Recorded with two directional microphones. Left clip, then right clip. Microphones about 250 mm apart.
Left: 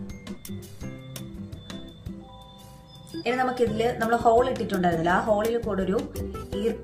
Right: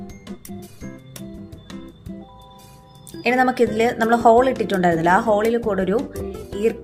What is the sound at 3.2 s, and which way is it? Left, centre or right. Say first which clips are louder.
Speech: right 7 dB; right.